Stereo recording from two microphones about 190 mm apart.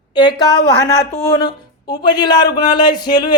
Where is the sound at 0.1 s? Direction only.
25° left (ahead or behind).